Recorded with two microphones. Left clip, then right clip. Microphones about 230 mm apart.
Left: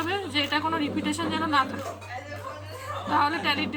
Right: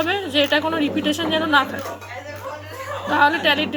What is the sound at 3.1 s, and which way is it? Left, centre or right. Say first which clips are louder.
Speech: right 8 dB; centre.